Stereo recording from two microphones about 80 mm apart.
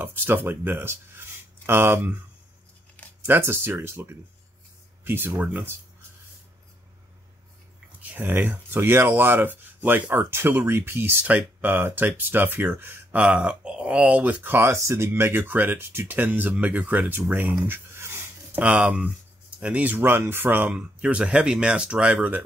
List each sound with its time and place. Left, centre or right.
0.0 s speech: right
3.3 s speech: right
8.0 s speech: right
13.2 s speech: centre
17.3 s a sound: right
18.6 s speech: centre
20.7 s speech: centre